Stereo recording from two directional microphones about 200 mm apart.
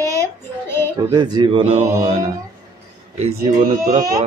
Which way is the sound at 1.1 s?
20° right (ahead or behind).